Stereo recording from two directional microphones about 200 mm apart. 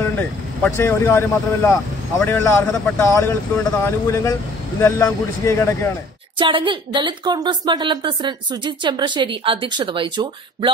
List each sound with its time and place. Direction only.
0.0 s speech: 10° left (ahead or behind)
6.3 s a woman's voice: 25° right (ahead or behind)